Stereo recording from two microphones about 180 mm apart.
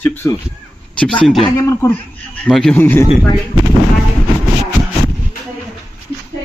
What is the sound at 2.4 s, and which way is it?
Speech, 5° left (ahead or behind).